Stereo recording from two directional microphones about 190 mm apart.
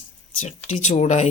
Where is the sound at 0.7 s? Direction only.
35° left (ahead or behind).